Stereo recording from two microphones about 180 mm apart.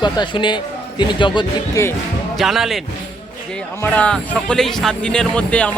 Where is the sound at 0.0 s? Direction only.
25° left (ahead or behind).